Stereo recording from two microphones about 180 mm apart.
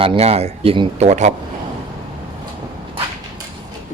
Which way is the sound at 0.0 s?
35° right (ahead or behind).